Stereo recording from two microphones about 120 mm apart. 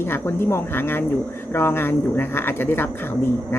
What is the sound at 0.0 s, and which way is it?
Speech, 20° left (ahead or behind).